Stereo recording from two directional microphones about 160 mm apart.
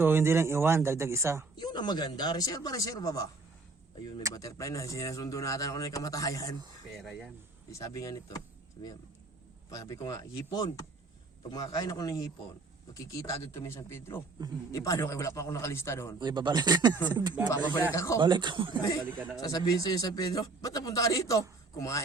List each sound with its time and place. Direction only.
0.0 s speech: 15° right (ahead or behind)
1.5 s a man's voice: 25° left (ahead or behind)
4.4 s a man's voice: 20° left (ahead or behind)
6.9 s speech: centre (ahead or behind)
7.7 s a man's voice: 20° left (ahead or behind)
9.6 s a man's voice: 20° left (ahead or behind)
16.2 s speech: 30° right (ahead or behind)
17.9 s a man's voice: 20° left (ahead or behind)
18.2 s speech: 30° right (ahead or behind)
18.8 s a man's voice: 25° left (ahead or behind)